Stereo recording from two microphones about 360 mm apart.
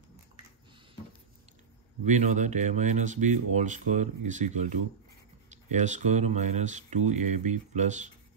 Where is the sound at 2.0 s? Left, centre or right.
Centre.